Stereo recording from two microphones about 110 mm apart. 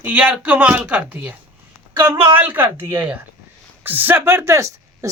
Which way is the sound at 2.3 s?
15° right (ahead or behind).